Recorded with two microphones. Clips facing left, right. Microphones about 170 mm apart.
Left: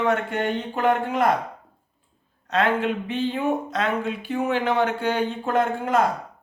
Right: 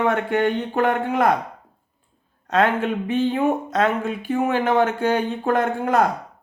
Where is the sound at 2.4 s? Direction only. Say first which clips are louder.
Right 2 dB; 50° right (ahead or behind).